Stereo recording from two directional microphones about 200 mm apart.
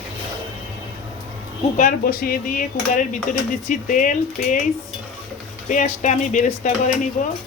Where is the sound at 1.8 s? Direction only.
45° left (ahead or behind).